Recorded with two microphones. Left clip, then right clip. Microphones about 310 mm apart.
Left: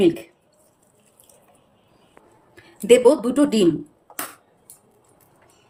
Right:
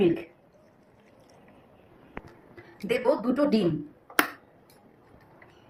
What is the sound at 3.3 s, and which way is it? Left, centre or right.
Speech, left.